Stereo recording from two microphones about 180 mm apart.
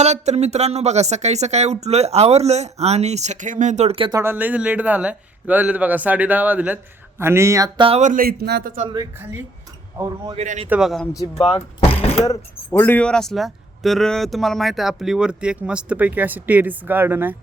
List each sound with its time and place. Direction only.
0.0 s speech: 40° right (ahead or behind)
4.2 s a man's voice: 10° right (ahead or behind)
7.9 s speech: 40° right (ahead or behind); by 8.7 s 65° right (ahead or behind)
10.3 s speech: 40° right (ahead or behind)
10.7 s speech: centre (ahead or behind)
11.3 s speech: 30° left (ahead or behind)
12.2 s speech: 15° left (ahead or behind); by 17.3 s 10° right (ahead or behind)